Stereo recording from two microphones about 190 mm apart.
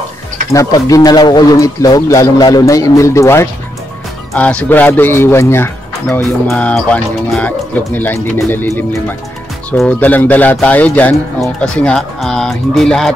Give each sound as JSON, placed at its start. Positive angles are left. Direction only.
{"t": 0.5, "sound": "speech", "side_deg": 15}